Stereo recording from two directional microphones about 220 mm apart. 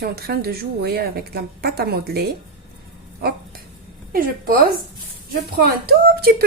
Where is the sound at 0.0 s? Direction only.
45° right (ahead or behind).